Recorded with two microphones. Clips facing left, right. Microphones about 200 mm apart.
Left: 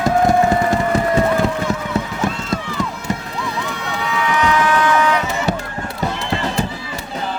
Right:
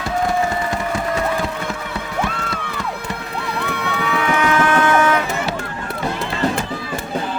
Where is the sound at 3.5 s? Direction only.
60° right (ahead or behind).